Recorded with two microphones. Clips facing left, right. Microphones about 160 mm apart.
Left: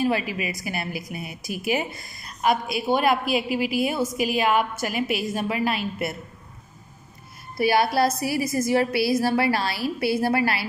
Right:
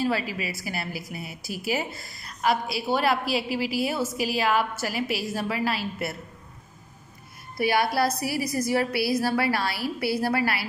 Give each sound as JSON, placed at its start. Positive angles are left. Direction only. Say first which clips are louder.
{"t": 0.0, "sound": "a woman's voice", "louder": "left 3 dB", "side_deg": 20}
{"t": 7.5, "sound": "a woman's voice", "louder": "left 3 dB", "side_deg": 25}